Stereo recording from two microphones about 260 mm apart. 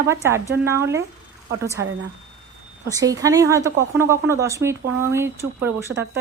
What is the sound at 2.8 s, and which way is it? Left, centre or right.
A woman's voice, centre.